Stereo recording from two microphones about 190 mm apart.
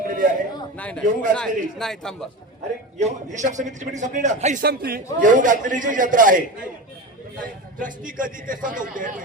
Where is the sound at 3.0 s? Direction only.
40° right (ahead or behind).